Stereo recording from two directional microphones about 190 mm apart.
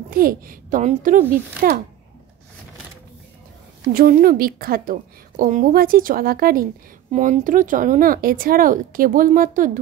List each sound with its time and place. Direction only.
0.1 s a woman's voice: 50° right (ahead or behind)
3.9 s a woman's voice: 50° right (ahead or behind)
7.1 s a woman's voice: 35° right (ahead or behind)